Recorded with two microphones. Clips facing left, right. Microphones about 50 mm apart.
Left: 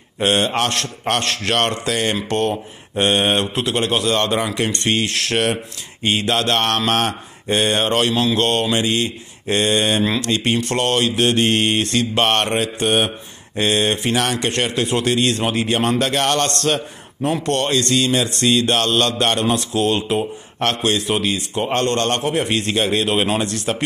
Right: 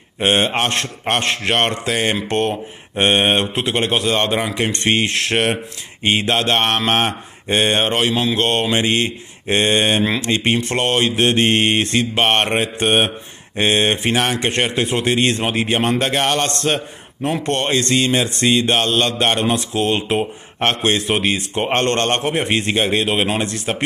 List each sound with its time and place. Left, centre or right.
0.2 s a man's voice: right
7.9 s a man's voice: centre; by 10.0 s right
10.0 s a man's voice: right
18.5 s a man's voice: centre